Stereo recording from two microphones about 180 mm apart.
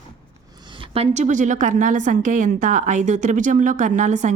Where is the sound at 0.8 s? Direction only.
35° right (ahead or behind).